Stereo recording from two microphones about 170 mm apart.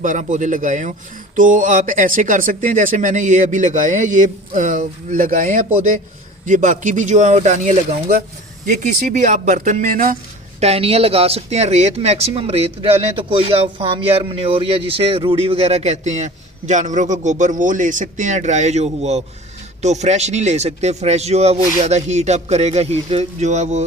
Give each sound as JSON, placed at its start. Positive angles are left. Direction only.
{"t": 0.0, "sound": "speech", "side_deg": -50}
{"t": 10.6, "sound": "speech", "side_deg": -35}